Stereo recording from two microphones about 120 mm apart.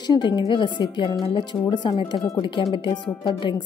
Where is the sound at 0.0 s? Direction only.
40° left (ahead or behind).